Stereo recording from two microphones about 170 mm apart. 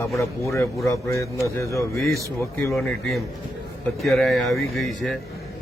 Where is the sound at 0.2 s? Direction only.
15° left (ahead or behind).